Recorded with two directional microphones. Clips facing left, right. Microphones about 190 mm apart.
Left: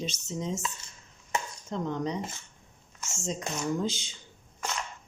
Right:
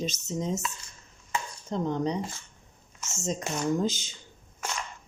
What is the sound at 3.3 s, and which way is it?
Speech, 45° right (ahead or behind).